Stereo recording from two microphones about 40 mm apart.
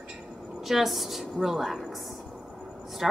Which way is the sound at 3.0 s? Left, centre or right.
Centre.